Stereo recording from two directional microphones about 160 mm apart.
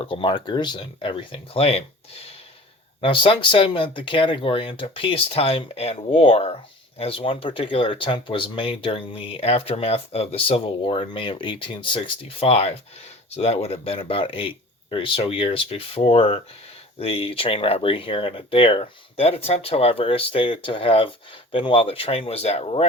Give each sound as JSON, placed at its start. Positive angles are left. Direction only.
{"t": 0.0, "sound": "speech", "side_deg": 35}